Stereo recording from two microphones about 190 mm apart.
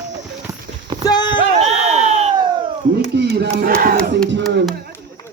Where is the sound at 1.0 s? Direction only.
20° left (ahead or behind).